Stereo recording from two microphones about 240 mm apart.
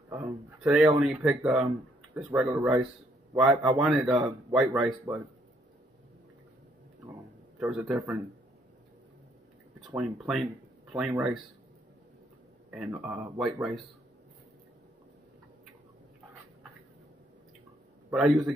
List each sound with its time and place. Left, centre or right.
0.1 s speech: centre
7.1 s a sound: centre
9.8 s speech: centre
12.7 s speech: centre
18.1 s speech: centre